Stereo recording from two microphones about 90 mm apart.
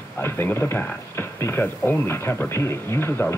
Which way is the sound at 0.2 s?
25° left (ahead or behind).